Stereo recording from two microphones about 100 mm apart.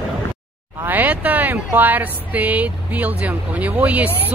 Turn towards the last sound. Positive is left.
turn(degrees=-15)  # may be behind; listen again after turning